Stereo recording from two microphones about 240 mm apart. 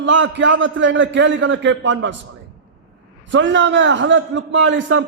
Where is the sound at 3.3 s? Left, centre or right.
Right.